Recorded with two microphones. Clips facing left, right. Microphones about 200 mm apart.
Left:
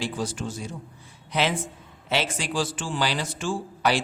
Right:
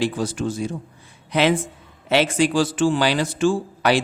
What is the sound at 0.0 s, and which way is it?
A man's voice, 60° right (ahead or behind).